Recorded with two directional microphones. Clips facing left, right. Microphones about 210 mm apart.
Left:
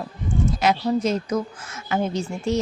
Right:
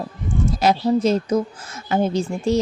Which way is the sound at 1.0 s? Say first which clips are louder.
Right 4 dB; 30° right (ahead or behind).